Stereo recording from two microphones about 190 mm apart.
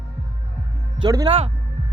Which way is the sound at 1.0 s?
20° right (ahead or behind).